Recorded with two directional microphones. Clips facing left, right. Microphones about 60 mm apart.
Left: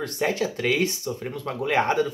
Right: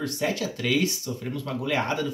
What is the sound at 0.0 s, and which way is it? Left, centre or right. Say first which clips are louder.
Speech: left 2 dB; left.